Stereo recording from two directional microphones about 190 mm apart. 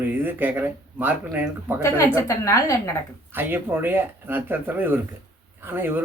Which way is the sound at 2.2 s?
15° left (ahead or behind).